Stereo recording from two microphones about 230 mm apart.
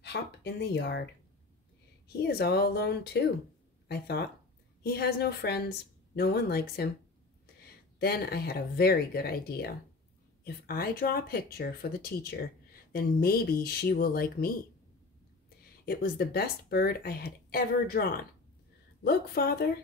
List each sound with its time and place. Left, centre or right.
0.0 s speech: left
2.2 s speech: left
8.0 s speech: left
15.8 s speech: left